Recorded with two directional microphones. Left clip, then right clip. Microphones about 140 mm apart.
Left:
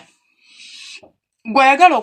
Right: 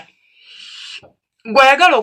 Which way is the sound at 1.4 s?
55° left (ahead or behind).